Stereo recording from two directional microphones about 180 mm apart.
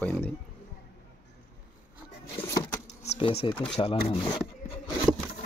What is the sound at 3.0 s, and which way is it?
Speech, 35° left (ahead or behind).